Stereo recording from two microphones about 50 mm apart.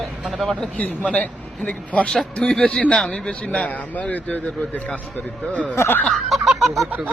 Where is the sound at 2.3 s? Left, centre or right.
Centre.